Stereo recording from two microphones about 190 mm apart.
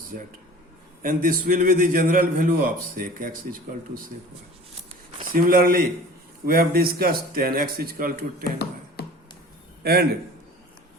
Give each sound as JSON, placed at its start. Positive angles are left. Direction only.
{"t": 1.0, "sound": "a man's voice", "side_deg": -50}
{"t": 5.2, "sound": "a man's voice", "side_deg": -50}
{"t": 9.8, "sound": "a man's voice", "side_deg": -55}